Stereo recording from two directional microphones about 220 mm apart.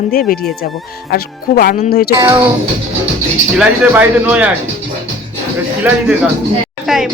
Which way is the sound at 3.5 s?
5° right (ahead or behind).